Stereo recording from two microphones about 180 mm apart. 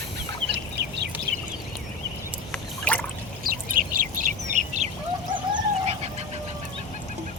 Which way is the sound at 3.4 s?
50° right (ahead or behind).